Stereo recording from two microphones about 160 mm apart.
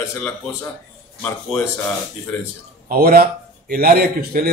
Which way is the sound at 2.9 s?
70° right (ahead or behind).